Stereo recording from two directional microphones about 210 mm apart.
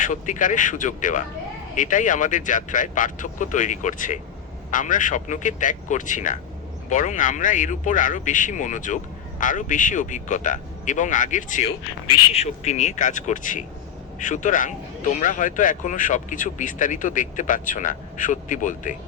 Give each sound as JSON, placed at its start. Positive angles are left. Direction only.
{"t": 0.0, "sound": "speech", "side_deg": 35}